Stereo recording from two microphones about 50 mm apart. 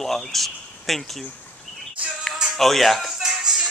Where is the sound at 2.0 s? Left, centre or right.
Right.